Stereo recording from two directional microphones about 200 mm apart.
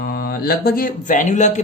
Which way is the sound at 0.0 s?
50° left (ahead or behind).